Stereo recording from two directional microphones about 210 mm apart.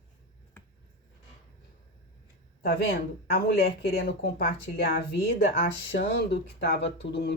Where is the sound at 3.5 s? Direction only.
45° left (ahead or behind).